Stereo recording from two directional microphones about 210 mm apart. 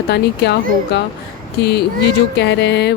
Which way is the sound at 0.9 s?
55° left (ahead or behind).